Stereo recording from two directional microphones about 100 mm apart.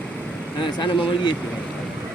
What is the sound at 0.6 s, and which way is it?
Speech, 50° left (ahead or behind).